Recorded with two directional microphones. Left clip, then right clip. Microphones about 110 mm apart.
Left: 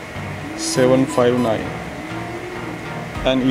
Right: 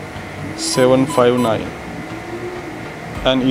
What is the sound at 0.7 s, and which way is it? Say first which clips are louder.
Speech: right 2 dB; 15° right (ahead or behind).